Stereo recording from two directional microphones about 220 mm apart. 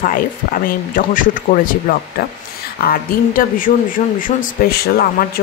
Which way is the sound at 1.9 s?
40° left (ahead or behind).